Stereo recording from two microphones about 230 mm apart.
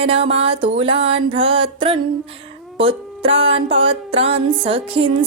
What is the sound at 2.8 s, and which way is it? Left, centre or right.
Music, right.